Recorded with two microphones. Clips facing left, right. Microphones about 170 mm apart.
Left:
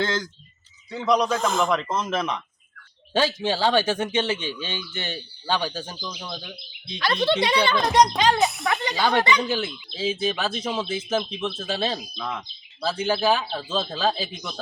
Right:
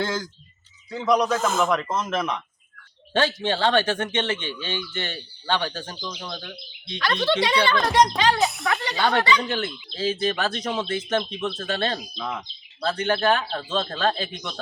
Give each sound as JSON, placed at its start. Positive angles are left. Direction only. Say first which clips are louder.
{"t": 0.0, "sound": "speech", "louder": "left 1 dB", "side_deg": -5}
{"t": 7.0, "sound": "speech", "louder": "left 1 dB", "side_deg": 30}
{"t": 8.4, "sound": "speech", "louder": "left 1 dB", "side_deg": 0}
{"t": 8.7, "sound": "a sound", "louder": "left 1 dB", "side_deg": 20}
{"t": 9.0, "sound": "speech", "louder": "even", "side_deg": 10}